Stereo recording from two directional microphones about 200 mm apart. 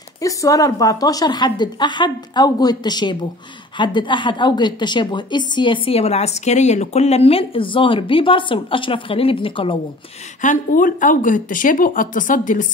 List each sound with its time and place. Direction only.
0.2 s a woman's voice: 15° left (ahead or behind)
10.4 s a woman's voice: 40° left (ahead or behind)